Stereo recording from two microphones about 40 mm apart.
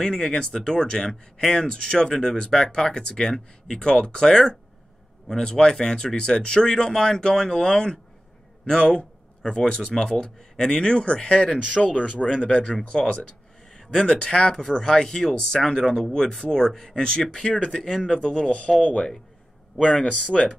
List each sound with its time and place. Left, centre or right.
0.0 s speech: centre
20.1 s speech: left